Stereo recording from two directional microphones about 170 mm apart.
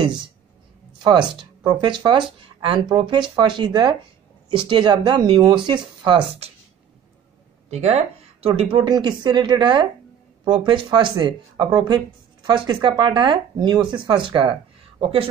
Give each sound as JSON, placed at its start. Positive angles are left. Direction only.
{"t": 1.0, "sound": "speech", "side_deg": -25}
{"t": 7.7, "sound": "speech", "side_deg": -40}